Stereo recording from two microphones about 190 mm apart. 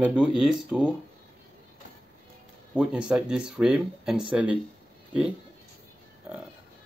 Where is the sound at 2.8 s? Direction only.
5° right (ahead or behind).